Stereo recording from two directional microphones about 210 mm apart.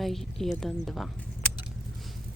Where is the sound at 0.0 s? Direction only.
Centre (ahead or behind).